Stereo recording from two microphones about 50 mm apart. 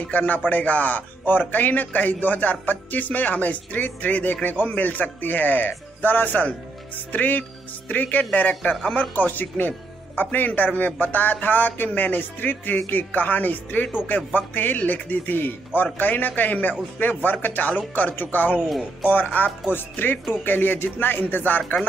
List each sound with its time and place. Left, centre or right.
0.0 s a man's voice: left
18.7 s speech: centre
19.1 s a man's voice: left